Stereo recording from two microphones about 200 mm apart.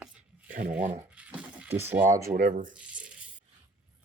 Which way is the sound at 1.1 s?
5° right (ahead or behind).